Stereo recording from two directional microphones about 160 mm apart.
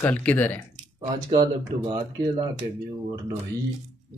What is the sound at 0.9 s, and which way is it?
A man's voice, 25° right (ahead or behind).